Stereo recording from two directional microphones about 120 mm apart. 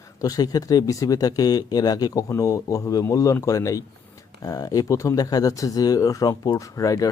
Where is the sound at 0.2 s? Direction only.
30° left (ahead or behind).